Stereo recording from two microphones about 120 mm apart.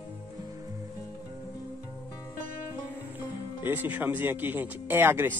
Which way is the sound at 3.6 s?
15° right (ahead or behind).